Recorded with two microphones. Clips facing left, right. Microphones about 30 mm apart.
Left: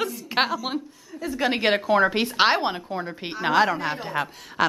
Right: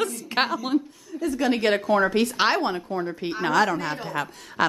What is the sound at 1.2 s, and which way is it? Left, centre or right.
A woman's voice, left.